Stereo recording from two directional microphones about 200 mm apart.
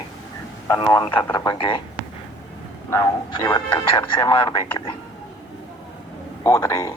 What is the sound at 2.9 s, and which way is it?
Speech, 20° left (ahead or behind).